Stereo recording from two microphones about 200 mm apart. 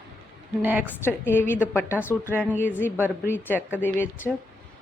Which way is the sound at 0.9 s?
10° left (ahead or behind).